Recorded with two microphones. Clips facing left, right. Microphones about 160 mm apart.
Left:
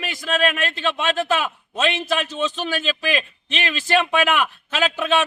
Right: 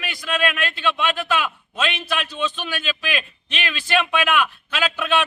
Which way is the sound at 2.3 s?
40° left (ahead or behind).